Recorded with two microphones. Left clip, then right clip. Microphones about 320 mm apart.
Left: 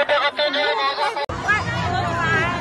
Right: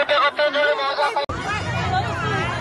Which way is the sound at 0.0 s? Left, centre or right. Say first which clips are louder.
Right 1 dB; centre.